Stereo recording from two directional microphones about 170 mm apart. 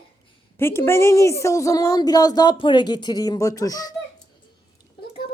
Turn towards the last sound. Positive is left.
turn(degrees=20)  # may be behind; listen again after turning